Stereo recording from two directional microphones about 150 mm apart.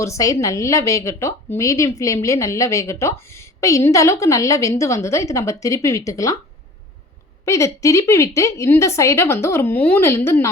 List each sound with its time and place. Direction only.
0.0 s a woman's voice: 20° left (ahead or behind)
7.4 s a woman's voice: 20° left (ahead or behind)